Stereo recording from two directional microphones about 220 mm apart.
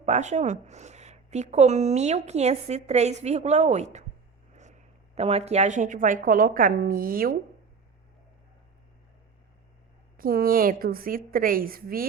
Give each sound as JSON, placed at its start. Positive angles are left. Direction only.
{"t": 0.0, "sound": "speech", "side_deg": -30}
{"t": 10.2, "sound": "speech", "side_deg": -40}